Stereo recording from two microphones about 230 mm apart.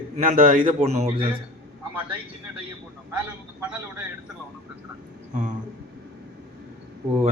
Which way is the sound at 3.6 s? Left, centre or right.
Centre.